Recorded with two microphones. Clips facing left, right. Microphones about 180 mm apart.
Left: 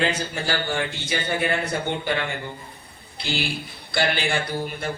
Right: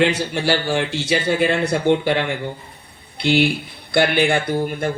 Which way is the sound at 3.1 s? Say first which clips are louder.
Right 11 dB; 60° right (ahead or behind).